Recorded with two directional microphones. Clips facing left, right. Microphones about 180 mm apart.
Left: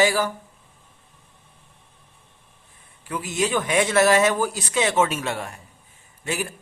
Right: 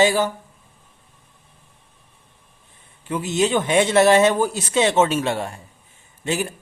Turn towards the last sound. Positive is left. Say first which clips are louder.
# right 4 dB
turn(degrees=-25)  # may be behind; listen again after turning